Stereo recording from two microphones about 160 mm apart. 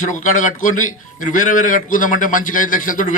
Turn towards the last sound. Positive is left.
turn(degrees=55)  # may be behind; listen again after turning